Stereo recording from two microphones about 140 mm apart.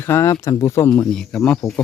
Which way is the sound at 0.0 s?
20° left (ahead or behind).